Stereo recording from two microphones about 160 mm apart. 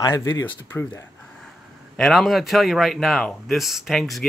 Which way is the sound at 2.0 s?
Centre (ahead or behind).